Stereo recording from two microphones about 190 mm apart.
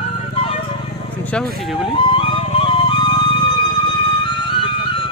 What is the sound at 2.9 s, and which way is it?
Music, 25° left (ahead or behind).